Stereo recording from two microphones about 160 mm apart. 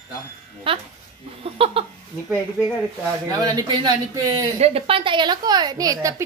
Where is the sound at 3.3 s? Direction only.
25° right (ahead or behind).